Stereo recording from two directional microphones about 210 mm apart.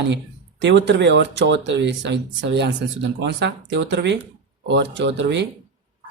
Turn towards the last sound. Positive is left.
turn(degrees=-55)  # may be behind; listen again after turning